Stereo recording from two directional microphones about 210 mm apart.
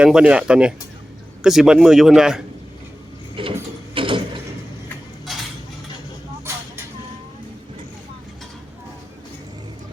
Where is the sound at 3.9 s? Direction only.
25° right (ahead or behind).